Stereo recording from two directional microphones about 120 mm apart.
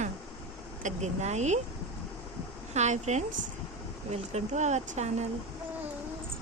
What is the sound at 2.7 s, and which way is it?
Speech, 75° right (ahead or behind).